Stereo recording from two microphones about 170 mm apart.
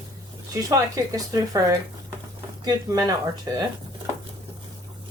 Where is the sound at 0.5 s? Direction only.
20° right (ahead or behind).